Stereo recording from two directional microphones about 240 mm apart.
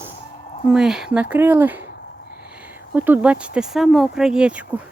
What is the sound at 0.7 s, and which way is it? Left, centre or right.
Speech, centre.